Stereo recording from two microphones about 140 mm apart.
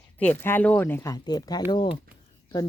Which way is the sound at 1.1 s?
25° left (ahead or behind).